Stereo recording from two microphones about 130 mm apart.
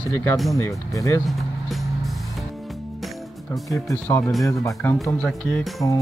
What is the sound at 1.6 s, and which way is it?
Music, centre (ahead or behind).